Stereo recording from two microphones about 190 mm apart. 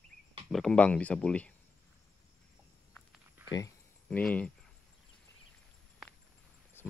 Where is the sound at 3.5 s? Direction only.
15° left (ahead or behind).